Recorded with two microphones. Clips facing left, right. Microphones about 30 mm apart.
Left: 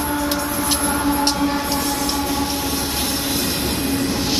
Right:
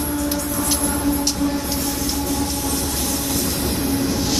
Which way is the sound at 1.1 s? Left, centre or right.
Left.